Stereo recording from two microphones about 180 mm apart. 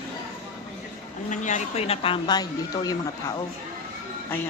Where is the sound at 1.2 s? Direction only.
40° left (ahead or behind); by 3.0 s 20° left (ahead or behind).